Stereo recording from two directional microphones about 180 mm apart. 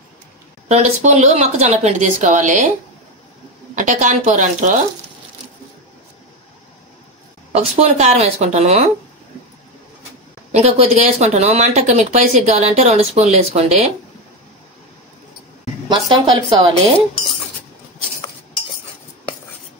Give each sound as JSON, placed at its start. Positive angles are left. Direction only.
{"t": 0.7, "sound": "speech", "side_deg": -40}
{"t": 3.7, "sound": "speech", "side_deg": -45}
{"t": 7.5, "sound": "speech", "side_deg": -35}
{"t": 10.5, "sound": "speech", "side_deg": -35}
{"t": 15.9, "sound": "speech", "side_deg": -25}